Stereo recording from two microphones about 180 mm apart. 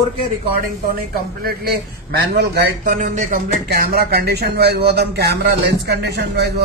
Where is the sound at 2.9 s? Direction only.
45° right (ahead or behind).